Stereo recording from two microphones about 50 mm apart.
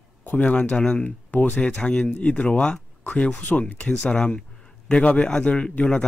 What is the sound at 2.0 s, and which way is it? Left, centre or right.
Speech, left.